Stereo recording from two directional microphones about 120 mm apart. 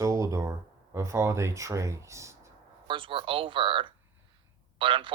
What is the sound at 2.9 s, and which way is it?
A man's voice, 45° right (ahead or behind).